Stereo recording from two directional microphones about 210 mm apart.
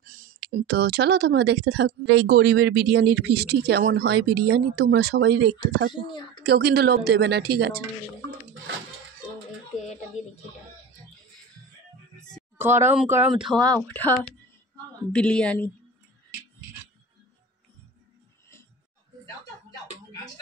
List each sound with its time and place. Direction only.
0.0 s speech: 40° right (ahead or behind)
5.9 s speech: 20° left (ahead or behind)
6.4 s speech: 50° right (ahead or behind)
12.5 s speech: 10° right (ahead or behind); by 14.1 s 10° left (ahead or behind)
15.1 s speech: 5° left (ahead or behind)